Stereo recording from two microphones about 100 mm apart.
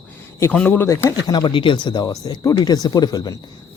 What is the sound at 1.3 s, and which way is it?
Speech, 50° left (ahead or behind).